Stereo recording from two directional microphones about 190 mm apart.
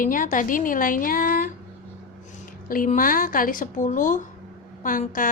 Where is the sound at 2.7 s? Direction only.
45° left (ahead or behind).